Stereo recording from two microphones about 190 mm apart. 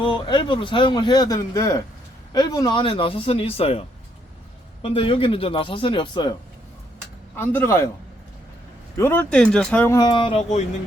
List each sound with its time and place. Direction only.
0.0 s speech: 25° left (ahead or behind)
7.3 s speech: 10° left (ahead or behind)
9.0 s speech: 10° left (ahead or behind); by 10.7 s 35° left (ahead or behind)